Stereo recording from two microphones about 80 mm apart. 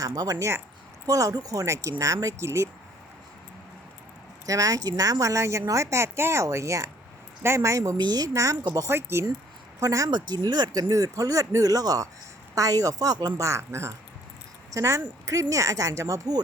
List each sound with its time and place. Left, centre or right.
0.0 s speech: right
0.3 s a woman's voice: right
4.4 s a woman's voice: right
7.9 s a woman's voice: right
8.9 s a woman's voice: right
9.8 s speech: right
10.1 s speech: right
13.3 s a woman's voice: right